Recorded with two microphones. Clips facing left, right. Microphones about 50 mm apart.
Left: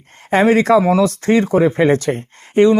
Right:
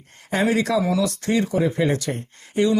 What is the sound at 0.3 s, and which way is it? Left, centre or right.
Speech, left.